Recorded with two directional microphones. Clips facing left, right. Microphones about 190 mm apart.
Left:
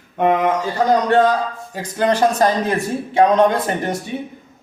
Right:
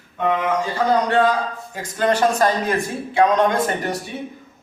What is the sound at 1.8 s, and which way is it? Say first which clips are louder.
Speech: left 2 dB; 20° left (ahead or behind).